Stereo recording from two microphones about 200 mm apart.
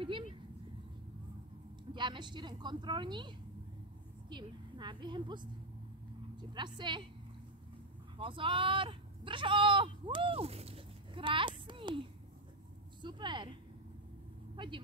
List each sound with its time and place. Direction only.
0.0 s a sound: 25° right (ahead or behind)
2.0 s a woman's voice: 25° right (ahead or behind)
8.2 s speech: 25° right (ahead or behind)
13.0 s a woman's voice: 25° right (ahead or behind)
14.6 s a woman's voice: 25° right (ahead or behind)